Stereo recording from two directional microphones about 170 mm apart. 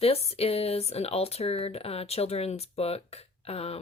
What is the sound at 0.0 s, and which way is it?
Speech, 35° left (ahead or behind).